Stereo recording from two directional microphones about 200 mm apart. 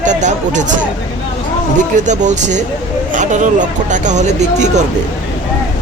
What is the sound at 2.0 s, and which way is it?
Speech, 35° right (ahead or behind).